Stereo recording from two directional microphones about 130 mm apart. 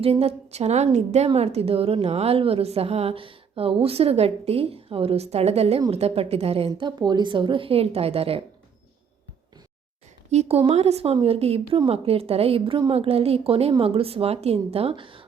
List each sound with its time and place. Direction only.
0.0 s a woman's voice: 50° right (ahead or behind)
6.7 s a woman's voice: 35° right (ahead or behind)
10.3 s a woman's voice: 60° right (ahead or behind); by 15.2 s 40° right (ahead or behind)